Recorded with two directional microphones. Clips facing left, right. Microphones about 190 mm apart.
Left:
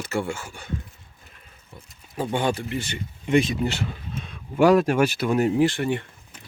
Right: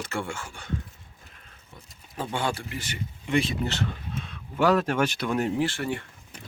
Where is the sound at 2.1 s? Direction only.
15° left (ahead or behind).